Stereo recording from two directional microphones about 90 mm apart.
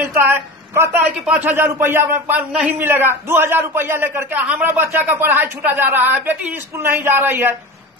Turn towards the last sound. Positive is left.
turn(degrees=-20)  # may be behind; listen again after turning